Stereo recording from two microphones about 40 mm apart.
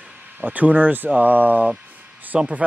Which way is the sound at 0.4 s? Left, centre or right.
Right.